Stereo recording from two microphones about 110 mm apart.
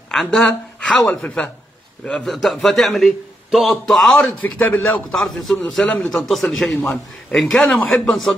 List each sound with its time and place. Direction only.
0.1 s a man's voice: centre (ahead or behind)